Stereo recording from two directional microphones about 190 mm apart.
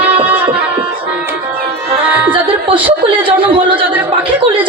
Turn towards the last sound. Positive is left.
turn(degrees=-25)  # may be behind; listen again after turning